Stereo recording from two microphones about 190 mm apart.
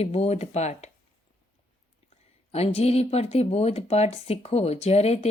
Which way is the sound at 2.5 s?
30° left (ahead or behind).